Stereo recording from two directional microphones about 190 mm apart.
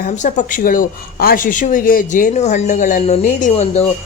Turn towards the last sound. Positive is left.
turn(degrees=35)  # may be behind; listen again after turning